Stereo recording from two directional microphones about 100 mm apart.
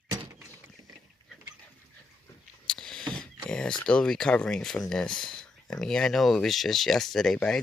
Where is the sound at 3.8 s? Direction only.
10° left (ahead or behind).